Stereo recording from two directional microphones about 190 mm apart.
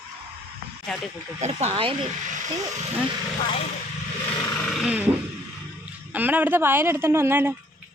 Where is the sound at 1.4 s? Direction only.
30° right (ahead or behind).